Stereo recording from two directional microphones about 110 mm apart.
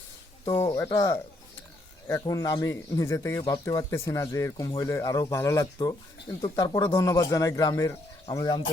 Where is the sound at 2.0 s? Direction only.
30° left (ahead or behind).